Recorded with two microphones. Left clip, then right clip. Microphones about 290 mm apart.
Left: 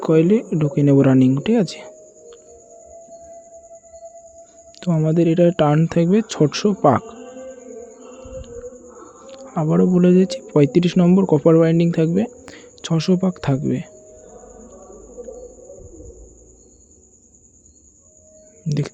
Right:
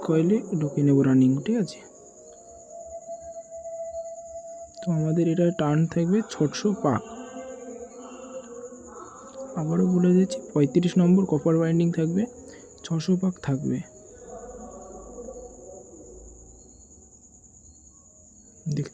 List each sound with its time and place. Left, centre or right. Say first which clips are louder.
0.0 s speech: left 8 dB; centre
4.8 s speech: left 7 dB; centre
9.2 s speech: left 9 dB; centre